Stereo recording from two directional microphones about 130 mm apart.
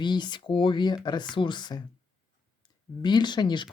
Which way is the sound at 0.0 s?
35° left (ahead or behind).